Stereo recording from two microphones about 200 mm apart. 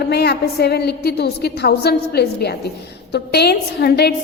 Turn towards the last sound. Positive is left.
turn(degrees=55)  # may be behind; listen again after turning